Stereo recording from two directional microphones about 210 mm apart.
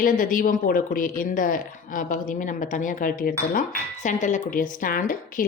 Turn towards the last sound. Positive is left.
turn(degrees=40)  # may be behind; listen again after turning